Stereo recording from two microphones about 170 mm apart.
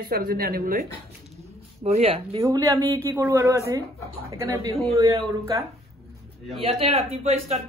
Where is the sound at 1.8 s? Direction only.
35° right (ahead or behind).